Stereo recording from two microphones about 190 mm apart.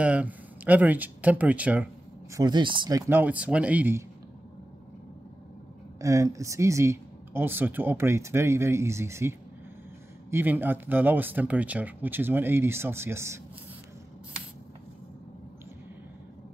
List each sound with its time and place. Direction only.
0.0 s speech: 5° right (ahead or behind)
2.3 s speech: 20° right (ahead or behind)
5.9 s speech: 15° right (ahead or behind)
10.3 s speech: 10° right (ahead or behind)